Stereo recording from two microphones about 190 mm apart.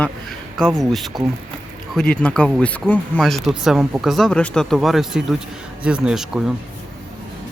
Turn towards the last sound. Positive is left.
turn(degrees=-5)  # may be behind; listen again after turning